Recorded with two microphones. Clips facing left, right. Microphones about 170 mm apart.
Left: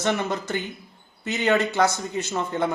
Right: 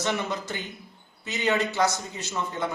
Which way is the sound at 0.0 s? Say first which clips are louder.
Left 4 dB; 50° left (ahead or behind).